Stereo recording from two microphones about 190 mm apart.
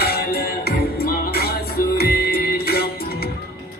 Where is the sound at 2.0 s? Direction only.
55° left (ahead or behind).